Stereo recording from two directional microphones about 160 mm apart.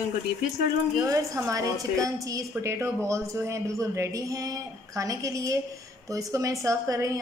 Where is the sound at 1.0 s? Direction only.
20° right (ahead or behind).